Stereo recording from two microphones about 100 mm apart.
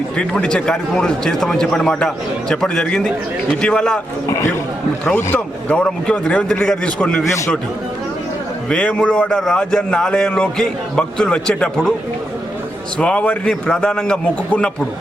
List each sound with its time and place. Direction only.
0.2 s speech: 10° left (ahead or behind)
4.3 s a man's voice: 30° left (ahead or behind)
5.0 s speech: 10° left (ahead or behind)
8.7 s speech: 10° left (ahead or behind)
13.0 s speech: 10° left (ahead or behind)